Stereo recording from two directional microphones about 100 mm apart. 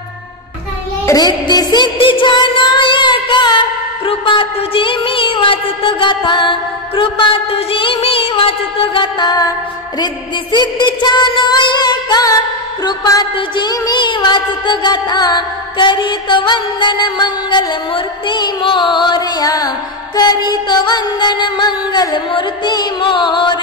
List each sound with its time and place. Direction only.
1.0 s music: 40° left (ahead or behind)
2.0 s music: 60° left (ahead or behind)
4.0 s music: 65° left (ahead or behind)
10.5 s music: 50° left (ahead or behind)